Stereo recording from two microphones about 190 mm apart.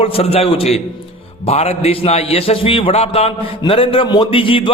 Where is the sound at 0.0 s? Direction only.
30° left (ahead or behind).